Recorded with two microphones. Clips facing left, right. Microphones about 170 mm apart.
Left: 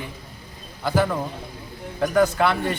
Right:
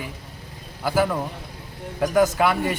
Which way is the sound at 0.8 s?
10° right (ahead or behind).